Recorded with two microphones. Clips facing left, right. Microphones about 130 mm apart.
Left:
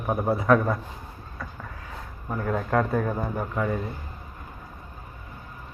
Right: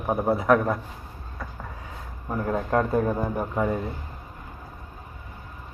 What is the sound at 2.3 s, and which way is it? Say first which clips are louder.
A man's voice: right 1 dB; 25° right (ahead or behind).